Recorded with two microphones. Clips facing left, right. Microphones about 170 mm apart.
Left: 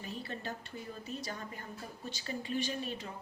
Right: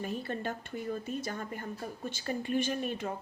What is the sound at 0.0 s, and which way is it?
A woman's voice, 50° right (ahead or behind).